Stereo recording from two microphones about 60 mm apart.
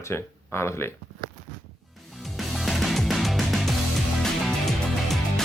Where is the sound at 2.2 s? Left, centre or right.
Centre.